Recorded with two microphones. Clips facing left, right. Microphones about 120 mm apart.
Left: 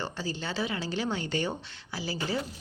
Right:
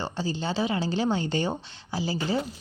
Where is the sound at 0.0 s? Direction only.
25° right (ahead or behind).